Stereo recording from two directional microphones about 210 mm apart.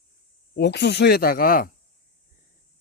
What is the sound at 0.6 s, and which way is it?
Speech, 55° left (ahead or behind).